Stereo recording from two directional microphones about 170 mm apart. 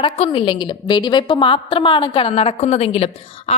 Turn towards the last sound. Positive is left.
turn(degrees=35)  # may be behind; listen again after turning